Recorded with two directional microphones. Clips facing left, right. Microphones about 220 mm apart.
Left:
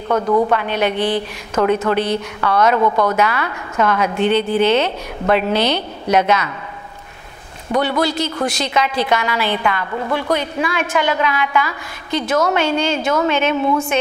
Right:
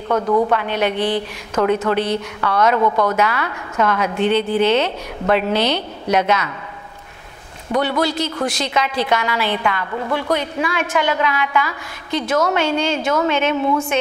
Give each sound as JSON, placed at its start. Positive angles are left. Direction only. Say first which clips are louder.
{"t": 0.1, "sound": "a woman's voice", "louder": "left 1 dB", "side_deg": 25}
{"t": 1.6, "sound": "a woman's voice", "louder": "left 1 dB", "side_deg": 25}
{"t": 8.0, "sound": "a woman's voice", "louder": "left 1 dB", "side_deg": 10}
{"t": 10.3, "sound": "a woman's voice", "louder": "left 1 dB", "side_deg": 15}